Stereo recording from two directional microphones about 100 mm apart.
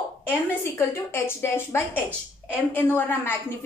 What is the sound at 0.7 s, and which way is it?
A woman's voice, 25° left (ahead or behind).